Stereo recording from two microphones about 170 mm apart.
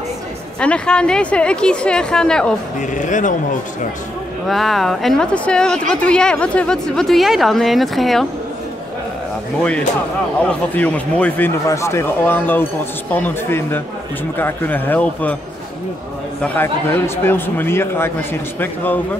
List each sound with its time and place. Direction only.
0.6 s speech: 5° left (ahead or behind)
2.9 s speech: 45° left (ahead or behind)
4.5 s speech: centre (ahead or behind)
9.6 s speech: 5° left (ahead or behind)
16.4 s speech: 10° left (ahead or behind)